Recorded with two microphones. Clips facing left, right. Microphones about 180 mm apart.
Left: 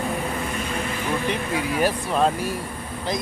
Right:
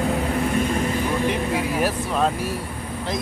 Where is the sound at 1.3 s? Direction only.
Centre (ahead or behind).